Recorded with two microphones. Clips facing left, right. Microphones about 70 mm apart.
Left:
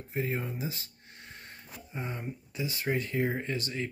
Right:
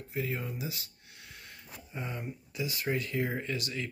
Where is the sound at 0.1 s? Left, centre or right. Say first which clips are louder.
Left 2 dB; left.